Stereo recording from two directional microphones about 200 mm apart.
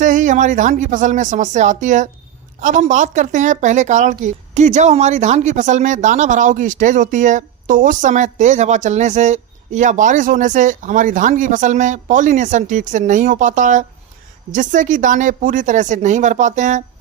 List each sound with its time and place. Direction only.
0.0 s a woman's voice: 40° right (ahead or behind)